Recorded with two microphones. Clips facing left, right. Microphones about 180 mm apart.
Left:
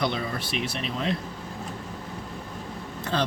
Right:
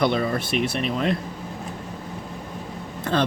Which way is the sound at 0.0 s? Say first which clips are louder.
Right 6 dB; 55° right (ahead or behind).